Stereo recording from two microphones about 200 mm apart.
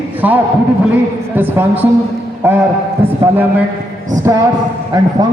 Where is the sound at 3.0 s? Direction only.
10° right (ahead or behind).